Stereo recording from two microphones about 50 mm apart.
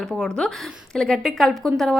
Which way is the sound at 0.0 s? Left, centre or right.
Centre.